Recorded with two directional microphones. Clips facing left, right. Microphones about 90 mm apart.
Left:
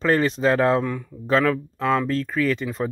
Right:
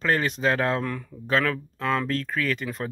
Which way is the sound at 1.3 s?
25° left (ahead or behind).